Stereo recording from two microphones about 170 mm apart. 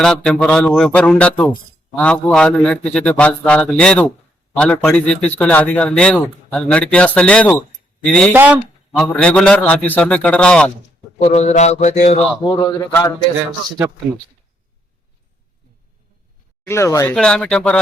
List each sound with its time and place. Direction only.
0.0 s a man's voice: 5° left (ahead or behind)
8.3 s speech: 10° right (ahead or behind)
9.0 s a man's voice: 5° left (ahead or behind)
11.2 s mantra: 40° left (ahead or behind)
12.5 s a man's voice: 20° left (ahead or behind)
16.6 s a man's voice: 15° left (ahead or behind)
17.2 s speech: 5° left (ahead or behind)